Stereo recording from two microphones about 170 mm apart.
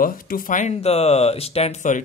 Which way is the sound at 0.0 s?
55° left (ahead or behind).